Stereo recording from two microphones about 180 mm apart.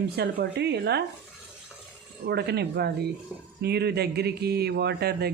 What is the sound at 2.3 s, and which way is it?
Speech, 65° right (ahead or behind).